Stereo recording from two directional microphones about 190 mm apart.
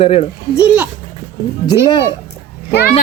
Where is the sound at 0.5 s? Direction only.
5° right (ahead or behind).